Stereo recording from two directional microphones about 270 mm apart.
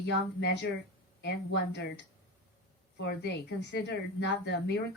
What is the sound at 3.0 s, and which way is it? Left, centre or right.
A woman's voice, left.